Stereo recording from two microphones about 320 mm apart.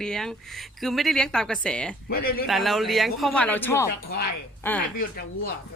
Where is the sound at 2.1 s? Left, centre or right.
Left.